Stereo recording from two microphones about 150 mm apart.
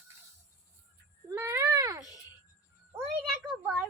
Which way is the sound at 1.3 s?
20° right (ahead or behind).